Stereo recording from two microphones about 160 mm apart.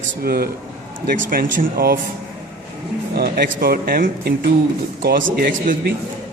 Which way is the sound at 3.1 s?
70° right (ahead or behind).